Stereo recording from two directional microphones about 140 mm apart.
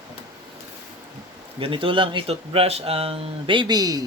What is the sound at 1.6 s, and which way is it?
Speech, 40° right (ahead or behind).